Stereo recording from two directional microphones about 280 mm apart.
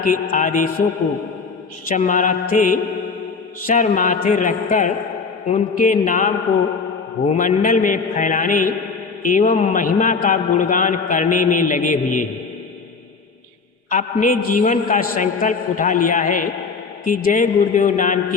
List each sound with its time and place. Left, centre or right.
0.0 s a man's voice: left
1.9 s a man's voice: left
7.3 s a man's voice: left
13.9 s a man's voice: left